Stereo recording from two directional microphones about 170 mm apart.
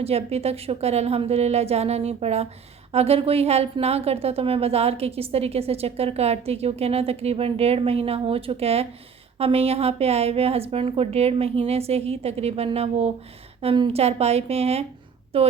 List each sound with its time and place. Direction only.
0.0 s a woman's voice: 35° right (ahead or behind)